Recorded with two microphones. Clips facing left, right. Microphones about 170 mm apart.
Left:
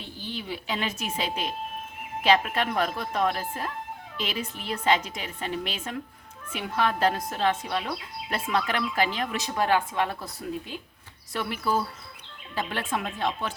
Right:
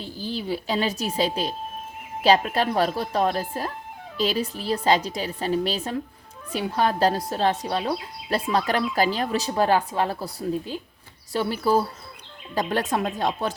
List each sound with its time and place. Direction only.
0.0 s speech: 35° right (ahead or behind)